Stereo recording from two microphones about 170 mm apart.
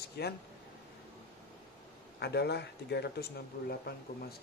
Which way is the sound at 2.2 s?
75° left (ahead or behind).